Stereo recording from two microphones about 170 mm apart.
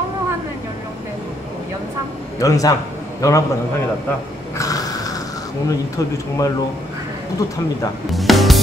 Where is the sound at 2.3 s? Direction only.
20° left (ahead or behind).